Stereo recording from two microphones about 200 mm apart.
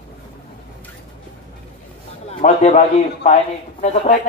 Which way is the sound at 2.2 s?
35° left (ahead or behind).